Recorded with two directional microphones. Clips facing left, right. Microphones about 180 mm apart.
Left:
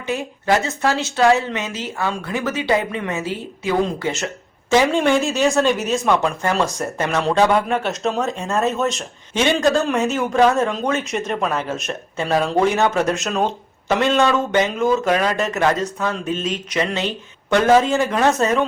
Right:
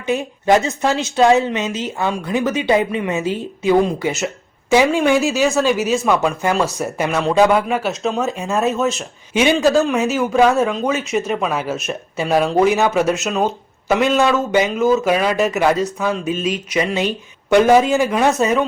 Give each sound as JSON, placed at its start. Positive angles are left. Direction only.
{"t": 0.1, "sound": "a woman's voice", "side_deg": -20}